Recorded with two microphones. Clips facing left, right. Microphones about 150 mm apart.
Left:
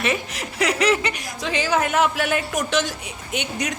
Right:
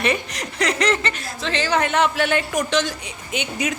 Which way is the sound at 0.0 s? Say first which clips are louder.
Right 2 dB; 5° left (ahead or behind).